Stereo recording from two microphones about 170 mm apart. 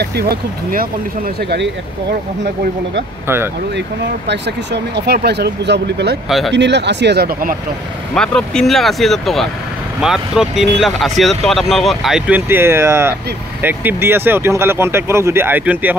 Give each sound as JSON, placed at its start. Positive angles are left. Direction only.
{"t": 0.0, "sound": "speech", "side_deg": -70}
{"t": 3.7, "sound": "speech", "side_deg": -90}
{"t": 6.2, "sound": "speech", "side_deg": 0}
{"t": 6.5, "sound": "speech", "side_deg": -90}
{"t": 8.1, "sound": "speech", "side_deg": 5}